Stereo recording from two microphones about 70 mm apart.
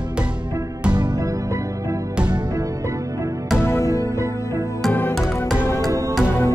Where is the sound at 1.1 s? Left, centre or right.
Right.